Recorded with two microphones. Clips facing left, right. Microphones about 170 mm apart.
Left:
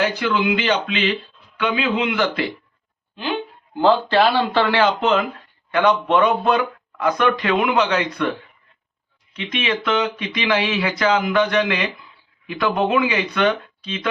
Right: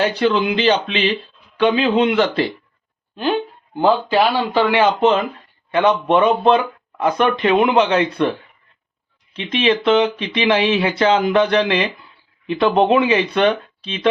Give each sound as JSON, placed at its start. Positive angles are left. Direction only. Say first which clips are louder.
{"t": 0.0, "sound": "speech", "louder": "right 3 dB", "side_deg": -30}
{"t": 3.8, "sound": "speech", "louder": "even", "side_deg": -10}
{"t": 9.3, "sound": "speech", "louder": "right 6 dB", "side_deg": -30}